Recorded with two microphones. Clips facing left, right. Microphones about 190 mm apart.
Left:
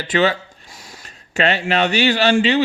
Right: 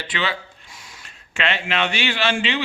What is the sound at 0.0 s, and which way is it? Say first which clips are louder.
Speech: left 9 dB; 45° left (ahead or behind).